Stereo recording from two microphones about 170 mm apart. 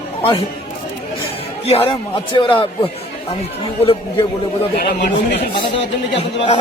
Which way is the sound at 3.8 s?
35° left (ahead or behind).